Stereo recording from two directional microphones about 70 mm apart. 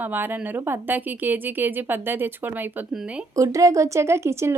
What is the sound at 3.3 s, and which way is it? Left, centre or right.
Speech, right.